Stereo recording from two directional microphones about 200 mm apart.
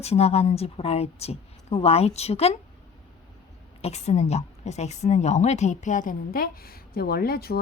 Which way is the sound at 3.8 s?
35° left (ahead or behind).